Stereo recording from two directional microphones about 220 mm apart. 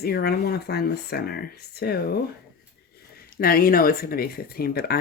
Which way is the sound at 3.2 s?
45° left (ahead or behind).